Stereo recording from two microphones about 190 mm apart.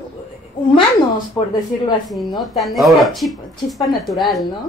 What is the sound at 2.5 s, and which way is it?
Speech, centre (ahead or behind).